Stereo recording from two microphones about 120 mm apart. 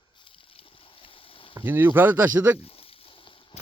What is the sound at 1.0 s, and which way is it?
Boat, 50° left (ahead or behind).